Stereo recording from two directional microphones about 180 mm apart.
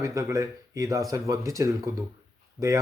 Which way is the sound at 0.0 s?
15° right (ahead or behind).